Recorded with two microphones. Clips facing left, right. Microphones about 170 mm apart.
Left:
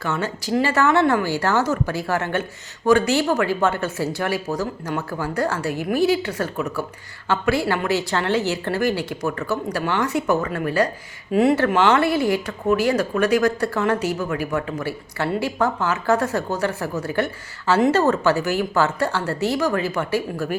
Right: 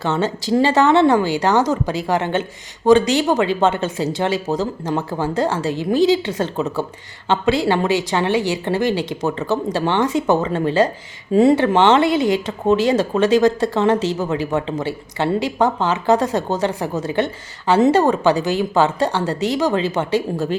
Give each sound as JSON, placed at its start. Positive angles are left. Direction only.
{"t": 0.0, "sound": "speech", "side_deg": -25}